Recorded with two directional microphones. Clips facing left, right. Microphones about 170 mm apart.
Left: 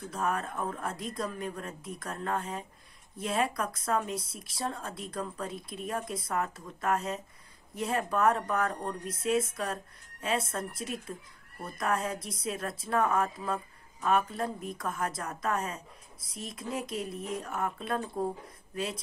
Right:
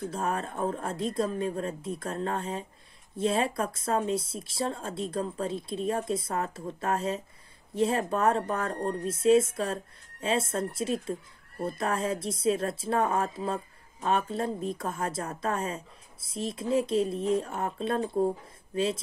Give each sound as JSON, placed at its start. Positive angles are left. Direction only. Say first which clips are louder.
{"t": 0.1, "sound": "a woman's voice", "louder": "right 1 dB", "side_deg": -30}